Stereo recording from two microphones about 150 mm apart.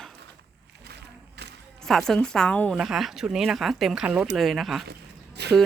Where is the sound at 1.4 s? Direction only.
90° right.